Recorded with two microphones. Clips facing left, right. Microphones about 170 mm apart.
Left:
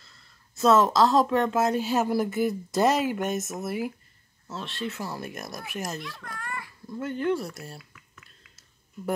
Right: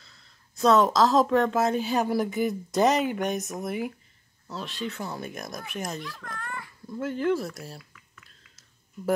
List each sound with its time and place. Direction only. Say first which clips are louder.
0.0 s speech: even; centre (ahead or behind)